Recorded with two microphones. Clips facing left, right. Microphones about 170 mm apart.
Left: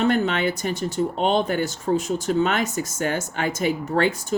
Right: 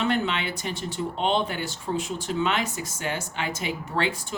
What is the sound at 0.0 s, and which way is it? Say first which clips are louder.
Speech: left 5 dB; 45° left (ahead or behind).